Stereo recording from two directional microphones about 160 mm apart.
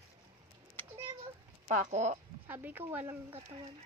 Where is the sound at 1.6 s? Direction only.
50° right (ahead or behind).